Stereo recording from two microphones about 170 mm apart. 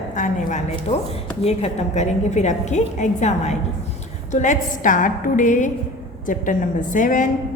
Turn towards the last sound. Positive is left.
turn(degrees=50)  # may be behind; listen again after turning